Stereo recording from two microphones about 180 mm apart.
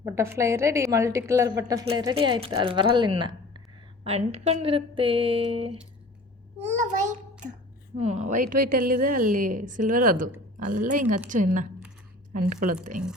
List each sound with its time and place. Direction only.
0.0 s a woman's voice: 15° right (ahead or behind); by 5.7 s 30° right (ahead or behind)
6.6 s a sound: 40° right (ahead or behind)
7.9 s a woman's voice: 40° right (ahead or behind)